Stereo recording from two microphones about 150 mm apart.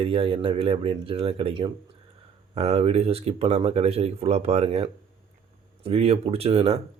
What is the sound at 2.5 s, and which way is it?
Speech, 45° right (ahead or behind).